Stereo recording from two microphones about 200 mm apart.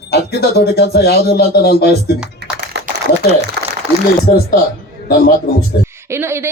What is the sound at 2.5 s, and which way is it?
Typing, 55° right (ahead or behind).